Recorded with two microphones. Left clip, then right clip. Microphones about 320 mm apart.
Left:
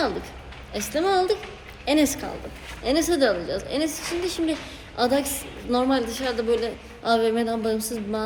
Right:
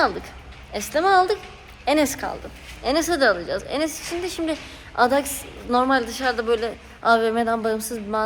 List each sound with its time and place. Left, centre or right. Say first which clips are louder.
0.0 s a woman's voice: right 4 dB; centre